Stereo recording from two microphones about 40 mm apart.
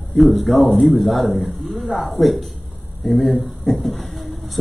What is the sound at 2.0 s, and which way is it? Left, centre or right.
A man's voice, centre.